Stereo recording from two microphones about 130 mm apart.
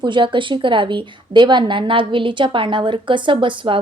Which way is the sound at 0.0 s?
40° right (ahead or behind).